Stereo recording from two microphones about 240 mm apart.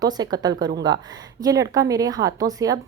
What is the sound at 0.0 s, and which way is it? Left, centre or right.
Speech, centre.